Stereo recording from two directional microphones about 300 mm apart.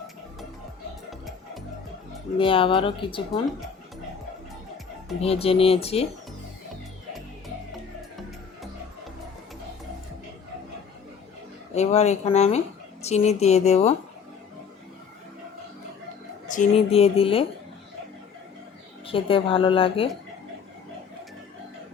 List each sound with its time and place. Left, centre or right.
2.4 s speech: centre
5.2 s speech: centre
11.7 s a woman's voice: left
16.5 s speech: left
19.0 s speech: centre